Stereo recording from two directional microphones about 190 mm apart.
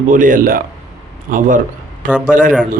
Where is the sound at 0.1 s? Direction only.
45° right (ahead or behind).